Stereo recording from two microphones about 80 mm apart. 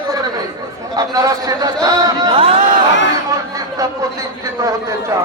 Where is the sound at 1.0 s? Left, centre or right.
Right.